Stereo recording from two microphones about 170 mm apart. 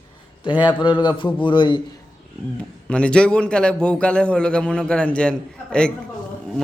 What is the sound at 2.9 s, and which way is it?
A man's voice, 5° left (ahead or behind).